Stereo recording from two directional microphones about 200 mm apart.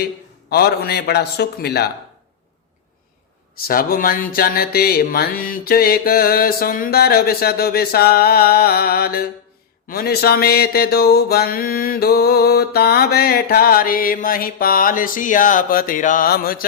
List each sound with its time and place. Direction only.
0.5 s mantra: 50° left (ahead or behind)
3.7 s mantra: 45° left (ahead or behind)